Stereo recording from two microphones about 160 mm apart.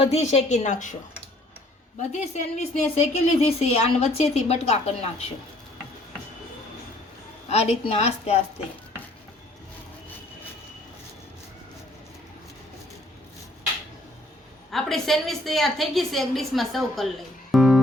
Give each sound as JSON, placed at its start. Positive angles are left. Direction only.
{"t": 0.0, "sound": "a woman's voice", "side_deg": 45}
{"t": 2.0, "sound": "a woman's voice", "side_deg": 45}
{"t": 7.4, "sound": "a woman's voice", "side_deg": 40}
{"t": 14.7, "sound": "a woman's voice", "side_deg": 0}
{"t": 17.5, "sound": "music", "side_deg": 0}